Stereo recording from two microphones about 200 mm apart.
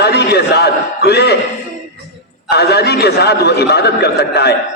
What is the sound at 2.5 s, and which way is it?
A man's voice, 55° left (ahead or behind).